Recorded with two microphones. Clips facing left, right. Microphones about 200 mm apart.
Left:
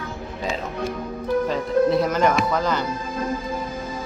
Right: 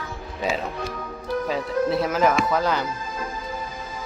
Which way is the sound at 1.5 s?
5° right (ahead or behind).